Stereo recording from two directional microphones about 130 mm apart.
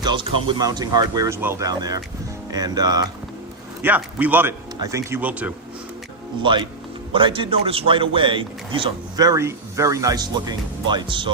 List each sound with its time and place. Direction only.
0.0 s a man's voice: 35° right (ahead or behind)
1.4 s speech: 15° right (ahead or behind)
1.6 s speech: 30° right (ahead or behind)
3.8 s speech: 15° right (ahead or behind)
6.4 s a man's voice: 35° right (ahead or behind)